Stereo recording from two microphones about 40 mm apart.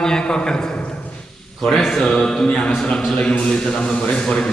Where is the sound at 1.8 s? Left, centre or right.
Centre.